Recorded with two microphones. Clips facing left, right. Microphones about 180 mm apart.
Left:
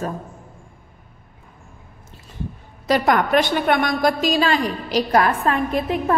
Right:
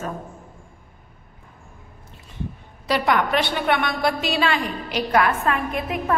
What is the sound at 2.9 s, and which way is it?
A woman's voice, 45° left (ahead or behind).